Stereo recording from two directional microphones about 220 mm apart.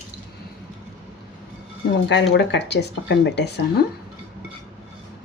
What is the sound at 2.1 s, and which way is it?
Speech, 50° left (ahead or behind).